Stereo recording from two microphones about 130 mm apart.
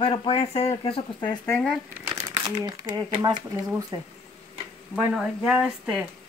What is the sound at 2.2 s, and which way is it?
Crumpling, 25° right (ahead or behind).